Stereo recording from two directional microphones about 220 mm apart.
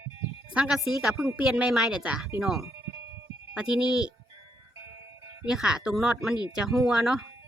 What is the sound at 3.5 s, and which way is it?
Speech, 5° right (ahead or behind).